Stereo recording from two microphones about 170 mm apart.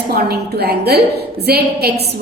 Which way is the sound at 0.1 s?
70° right (ahead or behind).